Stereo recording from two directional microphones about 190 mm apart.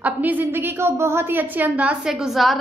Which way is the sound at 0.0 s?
10° right (ahead or behind).